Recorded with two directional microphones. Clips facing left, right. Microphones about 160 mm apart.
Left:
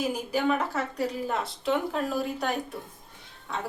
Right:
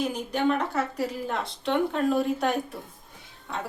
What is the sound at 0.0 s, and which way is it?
Speech, 5° left (ahead or behind).